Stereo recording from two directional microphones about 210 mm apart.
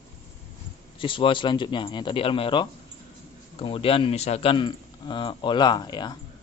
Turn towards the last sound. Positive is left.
turn(degrees=20)  # may be behind; listen again after turning